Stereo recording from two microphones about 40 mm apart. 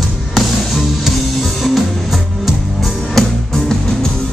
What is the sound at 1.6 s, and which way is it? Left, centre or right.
Music, centre.